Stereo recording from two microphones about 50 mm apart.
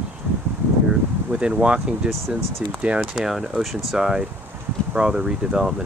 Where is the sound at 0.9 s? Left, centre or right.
Centre.